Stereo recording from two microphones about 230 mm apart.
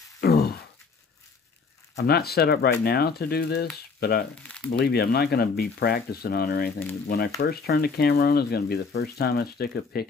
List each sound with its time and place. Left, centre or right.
0.2 s a sound: left
2.0 s speech: left
4.4 s speech: centre
4.6 s speech: left